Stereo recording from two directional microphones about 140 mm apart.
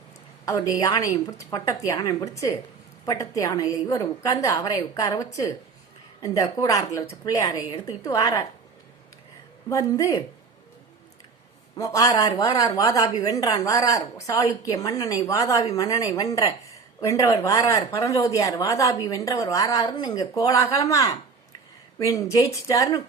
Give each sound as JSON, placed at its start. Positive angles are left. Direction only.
{"t": 0.4, "sound": "speech", "side_deg": 25}
{"t": 9.6, "sound": "speech", "side_deg": 20}
{"t": 11.8, "sound": "speech", "side_deg": 25}